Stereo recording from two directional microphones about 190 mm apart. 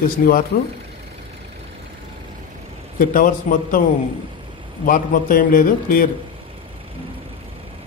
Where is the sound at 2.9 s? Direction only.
45° left (ahead or behind).